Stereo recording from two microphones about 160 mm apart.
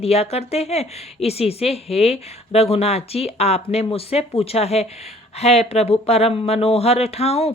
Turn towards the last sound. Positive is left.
turn(degrees=40)  # may be behind; listen again after turning